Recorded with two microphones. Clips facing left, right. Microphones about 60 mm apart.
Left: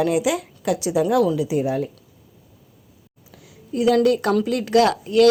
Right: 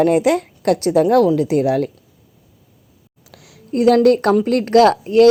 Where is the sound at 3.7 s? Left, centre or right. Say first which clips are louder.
Right 5 dB; right.